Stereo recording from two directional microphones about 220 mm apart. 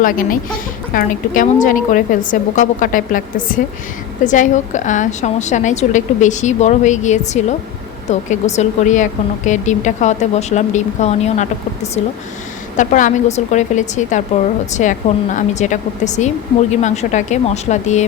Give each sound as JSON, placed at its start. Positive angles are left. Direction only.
{"t": 0.0, "sound": "a woman's voice", "side_deg": 40}